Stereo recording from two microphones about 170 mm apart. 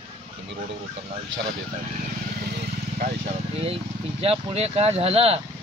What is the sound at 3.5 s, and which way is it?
Speech, 35° right (ahead or behind).